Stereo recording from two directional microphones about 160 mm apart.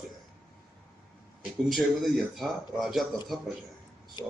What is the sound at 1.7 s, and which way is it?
Speech, centre (ahead or behind).